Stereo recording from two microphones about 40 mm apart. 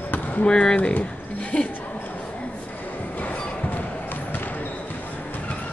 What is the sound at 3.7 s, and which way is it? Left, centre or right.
Music, left.